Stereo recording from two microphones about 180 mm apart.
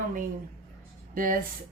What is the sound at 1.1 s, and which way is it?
Speech, 50° right (ahead or behind).